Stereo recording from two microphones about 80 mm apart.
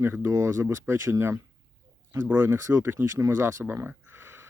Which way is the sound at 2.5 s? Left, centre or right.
Right.